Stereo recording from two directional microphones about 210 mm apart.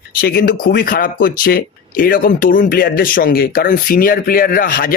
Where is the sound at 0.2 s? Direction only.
45° left (ahead or behind).